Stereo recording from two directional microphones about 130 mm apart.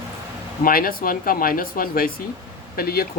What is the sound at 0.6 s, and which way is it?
Speech, 90° left.